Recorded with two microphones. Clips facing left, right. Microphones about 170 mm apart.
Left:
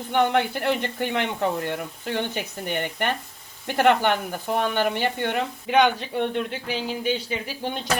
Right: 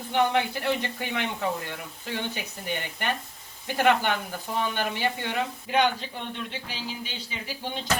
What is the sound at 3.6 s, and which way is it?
Speech, 55° left (ahead or behind).